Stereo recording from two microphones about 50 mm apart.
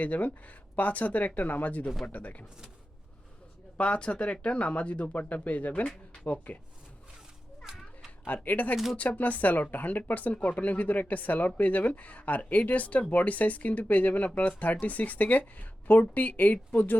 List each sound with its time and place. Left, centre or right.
0.0 s speech: left
3.8 s speech: left
8.3 s speech: left